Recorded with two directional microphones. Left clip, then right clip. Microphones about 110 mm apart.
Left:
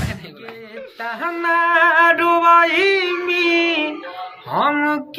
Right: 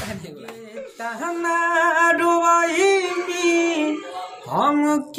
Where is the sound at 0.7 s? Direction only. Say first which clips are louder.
Left 2 dB; 30° right (ahead or behind).